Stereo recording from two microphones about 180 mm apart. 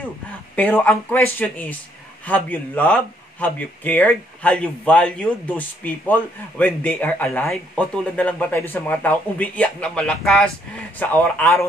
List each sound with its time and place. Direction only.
0.6 s speech: 10° left (ahead or behind)